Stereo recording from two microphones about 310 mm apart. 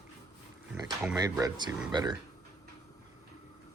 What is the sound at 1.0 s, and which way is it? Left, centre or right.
Speech, centre.